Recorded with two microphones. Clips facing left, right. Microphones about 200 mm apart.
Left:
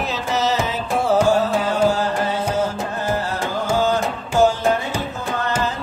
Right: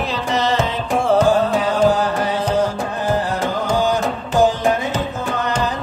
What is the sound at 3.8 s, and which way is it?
Music, 15° right (ahead or behind).